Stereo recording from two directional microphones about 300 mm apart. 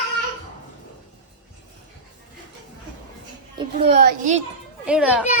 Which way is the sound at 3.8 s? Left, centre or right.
Right.